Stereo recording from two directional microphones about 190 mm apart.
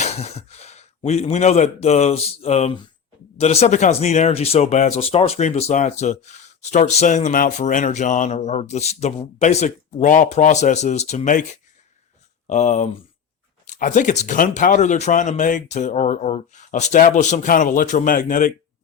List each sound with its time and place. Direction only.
0.0 s speech: 35° left (ahead or behind)